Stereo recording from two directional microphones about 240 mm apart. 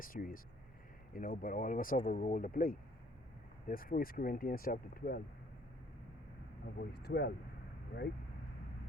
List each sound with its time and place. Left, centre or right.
0.0 s speech: left
6.7 s speech: left